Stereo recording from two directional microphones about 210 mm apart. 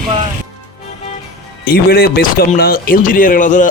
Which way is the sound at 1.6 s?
45° left (ahead or behind).